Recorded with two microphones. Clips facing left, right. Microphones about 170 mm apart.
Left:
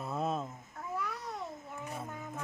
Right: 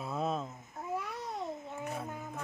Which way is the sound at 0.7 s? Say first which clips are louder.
Right 1 dB; 25° right (ahead or behind).